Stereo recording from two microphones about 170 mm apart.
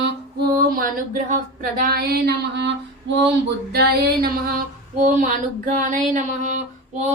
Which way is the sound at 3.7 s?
70° right (ahead or behind).